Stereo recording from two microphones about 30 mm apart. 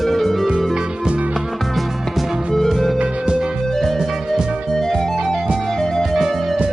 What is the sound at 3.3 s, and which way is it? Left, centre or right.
Music, right.